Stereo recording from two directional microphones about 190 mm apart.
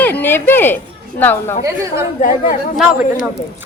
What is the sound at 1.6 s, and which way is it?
Speech, 15° right (ahead or behind).